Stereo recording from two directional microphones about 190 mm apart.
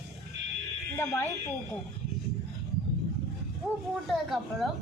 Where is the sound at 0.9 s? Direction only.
15° left (ahead or behind).